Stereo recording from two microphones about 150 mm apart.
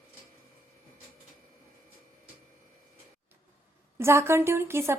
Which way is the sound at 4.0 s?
15° right (ahead or behind).